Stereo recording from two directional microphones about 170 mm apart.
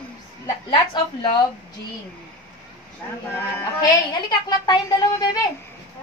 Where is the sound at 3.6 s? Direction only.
20° left (ahead or behind).